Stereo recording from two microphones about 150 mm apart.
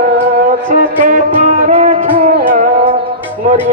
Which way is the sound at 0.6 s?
60° right (ahead or behind).